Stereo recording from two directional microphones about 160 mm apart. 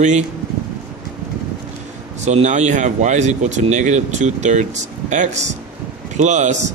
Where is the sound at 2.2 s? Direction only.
45° right (ahead or behind).